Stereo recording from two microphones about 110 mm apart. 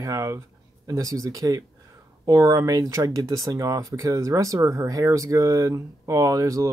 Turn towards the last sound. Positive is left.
turn(degrees=-30)  # may be behind; listen again after turning